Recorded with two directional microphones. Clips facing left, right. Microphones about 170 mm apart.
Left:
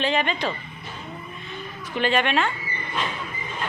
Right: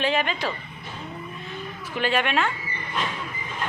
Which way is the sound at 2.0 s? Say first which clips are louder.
Left 2 dB; 5° right (ahead or behind).